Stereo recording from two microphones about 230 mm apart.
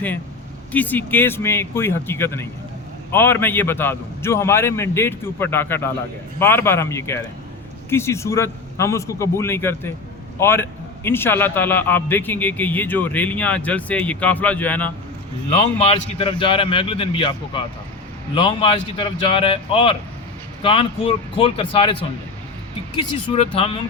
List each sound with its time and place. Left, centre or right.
0.7 s a man's voice: centre
15.8 s a man's voice: left
23.0 s a man's voice: left